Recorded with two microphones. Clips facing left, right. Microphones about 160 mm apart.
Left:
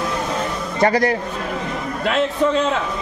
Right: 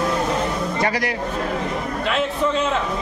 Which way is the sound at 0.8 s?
45° left (ahead or behind).